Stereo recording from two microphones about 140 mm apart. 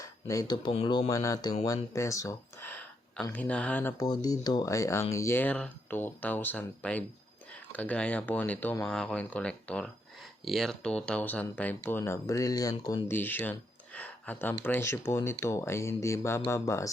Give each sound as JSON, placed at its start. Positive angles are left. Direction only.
{"t": 0.0, "sound": "speech", "side_deg": 25}
{"t": 3.9, "sound": "speech", "side_deg": 30}
{"t": 13.1, "sound": "speech", "side_deg": 15}